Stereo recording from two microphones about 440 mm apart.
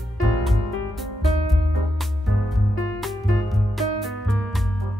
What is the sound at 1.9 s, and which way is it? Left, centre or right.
Music, centre.